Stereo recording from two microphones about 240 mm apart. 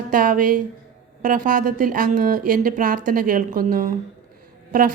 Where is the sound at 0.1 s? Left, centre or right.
Right.